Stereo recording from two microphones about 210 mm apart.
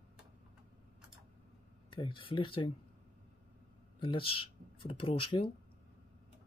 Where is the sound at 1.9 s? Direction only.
25° left (ahead or behind).